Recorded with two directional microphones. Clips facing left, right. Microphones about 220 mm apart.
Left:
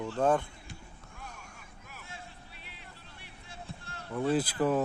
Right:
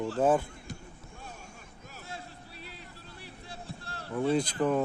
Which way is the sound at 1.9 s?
35° right (ahead or behind).